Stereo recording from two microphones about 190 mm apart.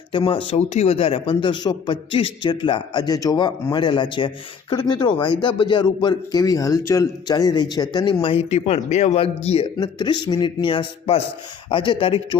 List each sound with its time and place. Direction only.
0.1 s speech: 25° left (ahead or behind)